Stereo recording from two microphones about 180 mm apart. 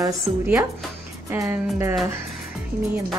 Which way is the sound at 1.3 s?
15° right (ahead or behind).